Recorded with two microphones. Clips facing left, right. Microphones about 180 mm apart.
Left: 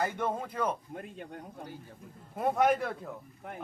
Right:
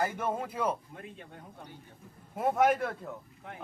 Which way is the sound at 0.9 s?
45° left (ahead or behind).